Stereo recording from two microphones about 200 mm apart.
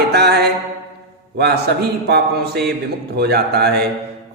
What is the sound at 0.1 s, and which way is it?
Music, 55° right (ahead or behind).